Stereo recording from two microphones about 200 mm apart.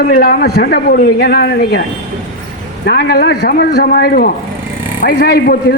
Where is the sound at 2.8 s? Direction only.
50° left (ahead or behind).